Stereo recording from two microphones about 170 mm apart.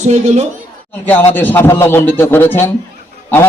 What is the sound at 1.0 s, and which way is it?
Speech, 10° left (ahead or behind).